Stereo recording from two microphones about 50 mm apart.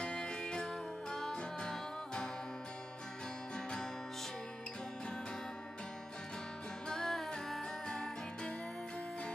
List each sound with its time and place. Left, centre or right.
0.0 s music: centre
6.9 s music: centre